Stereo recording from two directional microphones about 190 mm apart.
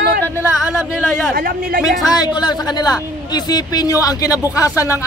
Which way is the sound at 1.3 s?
45° right (ahead or behind).